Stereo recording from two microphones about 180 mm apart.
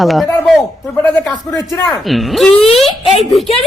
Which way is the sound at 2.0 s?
Centre (ahead or behind).